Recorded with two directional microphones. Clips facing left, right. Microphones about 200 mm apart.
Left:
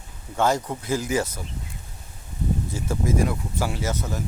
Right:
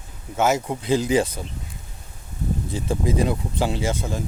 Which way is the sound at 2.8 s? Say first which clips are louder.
Right 2 dB; 25° right (ahead or behind).